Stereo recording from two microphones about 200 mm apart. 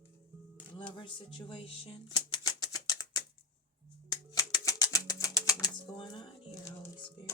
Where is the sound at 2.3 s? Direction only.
20° left (ahead or behind).